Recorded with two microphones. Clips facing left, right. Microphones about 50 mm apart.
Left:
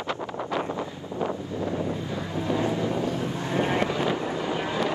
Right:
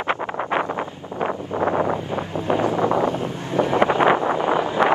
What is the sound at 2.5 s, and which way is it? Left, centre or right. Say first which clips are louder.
Wind noise: right 7 dB; right.